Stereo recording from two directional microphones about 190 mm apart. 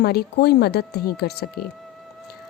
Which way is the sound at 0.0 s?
55° left (ahead or behind).